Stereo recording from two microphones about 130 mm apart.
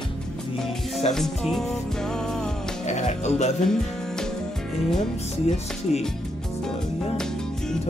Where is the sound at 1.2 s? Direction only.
Centre (ahead or behind).